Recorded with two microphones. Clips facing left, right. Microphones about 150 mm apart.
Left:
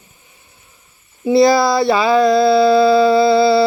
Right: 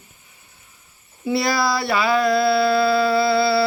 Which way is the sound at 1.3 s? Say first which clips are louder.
Left 9 dB; 25° left (ahead or behind).